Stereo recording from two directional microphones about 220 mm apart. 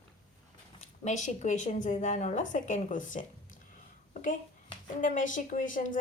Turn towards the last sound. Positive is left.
turn(degrees=35)  # may be behind; listen again after turning